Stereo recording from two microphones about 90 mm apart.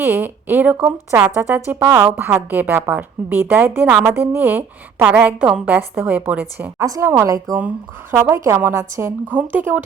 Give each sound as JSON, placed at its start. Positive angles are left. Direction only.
{"t": 0.1, "sound": "a woman's voice", "side_deg": -20}
{"t": 6.7, "sound": "a woman's voice", "side_deg": -40}
{"t": 8.1, "sound": "a woman's voice", "side_deg": -30}